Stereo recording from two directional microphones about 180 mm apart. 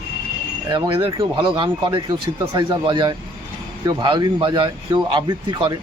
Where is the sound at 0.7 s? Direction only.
30° right (ahead or behind).